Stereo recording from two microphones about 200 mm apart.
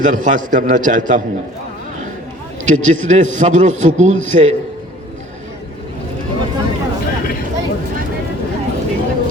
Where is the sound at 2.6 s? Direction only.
40° right (ahead or behind).